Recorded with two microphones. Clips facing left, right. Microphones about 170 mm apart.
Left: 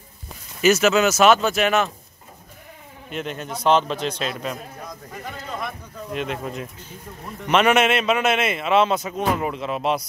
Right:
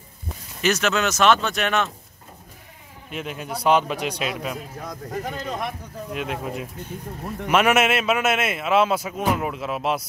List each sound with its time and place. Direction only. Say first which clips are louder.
0.6 s a man's voice: left 5 dB; 5° left (ahead or behind)
3.1 s a man's voice: left 1 dB; 5° right (ahead or behind)
6.1 s a man's voice: left 1 dB; 5° right (ahead or behind)